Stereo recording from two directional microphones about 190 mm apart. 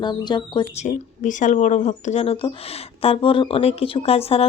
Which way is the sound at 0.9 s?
40° left (ahead or behind).